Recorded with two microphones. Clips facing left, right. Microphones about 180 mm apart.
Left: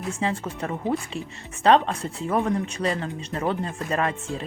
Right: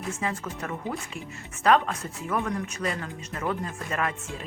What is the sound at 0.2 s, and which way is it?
Speech, 30° left (ahead or behind).